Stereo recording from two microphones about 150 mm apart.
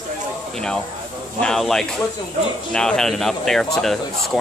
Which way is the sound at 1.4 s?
5° left (ahead or behind).